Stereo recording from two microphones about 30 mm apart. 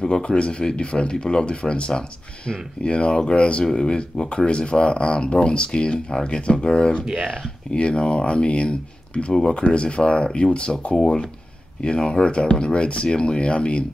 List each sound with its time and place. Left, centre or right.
0.0 s speech: left